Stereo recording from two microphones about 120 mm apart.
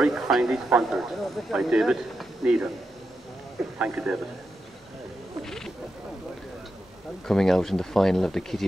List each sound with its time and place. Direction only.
0.0 s speech: centre (ahead or behind)
3.7 s a man's voice: 10° right (ahead or behind)
5.4 s wild animals: 5° left (ahead or behind)
7.2 s speech: 5° left (ahead or behind)